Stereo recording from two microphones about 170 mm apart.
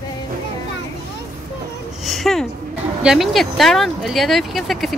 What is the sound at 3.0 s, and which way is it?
Speech, centre (ahead or behind).